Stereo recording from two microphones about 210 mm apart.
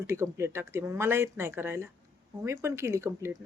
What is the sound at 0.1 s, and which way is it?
Speech, 10° right (ahead or behind).